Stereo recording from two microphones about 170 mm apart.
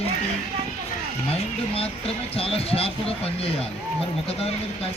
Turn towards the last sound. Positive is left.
turn(degrees=35)  # may be behind; listen again after turning